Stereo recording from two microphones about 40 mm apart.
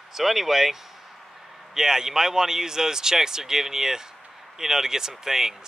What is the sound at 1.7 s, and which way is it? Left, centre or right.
Speech, centre.